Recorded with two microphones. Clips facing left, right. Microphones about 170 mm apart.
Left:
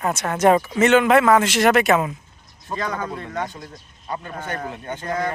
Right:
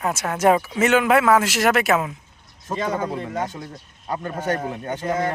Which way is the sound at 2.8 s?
20° right (ahead or behind).